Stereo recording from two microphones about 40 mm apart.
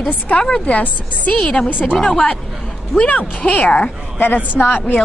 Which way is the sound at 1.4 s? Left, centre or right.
Left.